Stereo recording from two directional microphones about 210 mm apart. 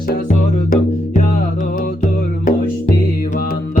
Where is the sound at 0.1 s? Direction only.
40° left (ahead or behind).